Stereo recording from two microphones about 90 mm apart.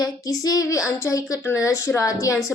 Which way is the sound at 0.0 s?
40° left (ahead or behind).